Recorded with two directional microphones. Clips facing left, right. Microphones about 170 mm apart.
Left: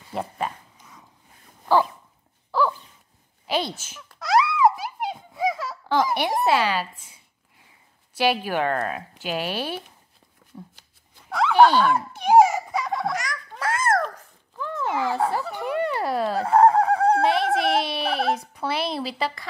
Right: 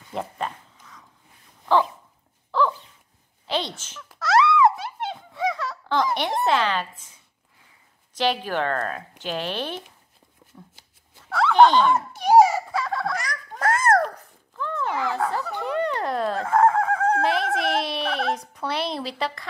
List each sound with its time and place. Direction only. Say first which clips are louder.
0.1 s speech: left 1 dB; 5° left (ahead or behind)
0.7 s a sound: even; 20° left (ahead or behind)
2.5 s dog: even; 5° left (ahead or behind)
3.4 s speech: left 1 dB; 10° left (ahead or behind)
5.1 s a sound: left 1 dB; 20° left (ahead or behind)
8.1 s speech: left 1 dB; 10° left (ahead or behind)
11.3 s turkey: even; 10° left (ahead or behind)
13.3 s babbling: right 3 dB; 40° right (ahead or behind)
14.6 s dog: left 1 dB; 15° left (ahead or behind)
15.3 s a sound: even; 15° left (ahead or behind)
16.4 s fowl: left 3 dB; 35° left (ahead or behind)
17.2 s dog: left 2 dB; centre (ahead or behind)
17.6 s a sound: left 2 dB; centre (ahead or behind)